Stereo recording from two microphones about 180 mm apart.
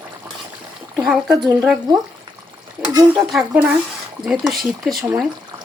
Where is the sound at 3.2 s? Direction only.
5° right (ahead or behind).